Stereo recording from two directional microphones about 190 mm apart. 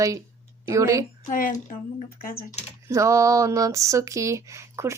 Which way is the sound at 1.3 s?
45° left (ahead or behind).